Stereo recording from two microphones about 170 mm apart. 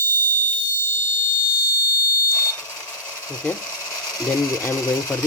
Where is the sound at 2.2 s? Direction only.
20° left (ahead or behind).